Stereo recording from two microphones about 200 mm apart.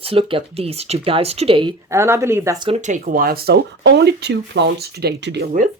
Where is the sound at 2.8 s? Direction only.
40° right (ahead or behind).